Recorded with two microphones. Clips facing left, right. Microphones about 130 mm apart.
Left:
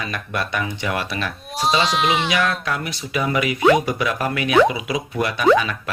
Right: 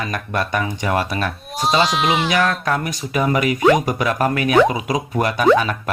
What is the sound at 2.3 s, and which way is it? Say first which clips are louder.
Speech: right 3 dB; 35° right (ahead or behind).